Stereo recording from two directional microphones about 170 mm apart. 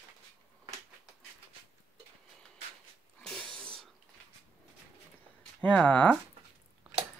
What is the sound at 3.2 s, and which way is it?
Sneeze, 5° left (ahead or behind).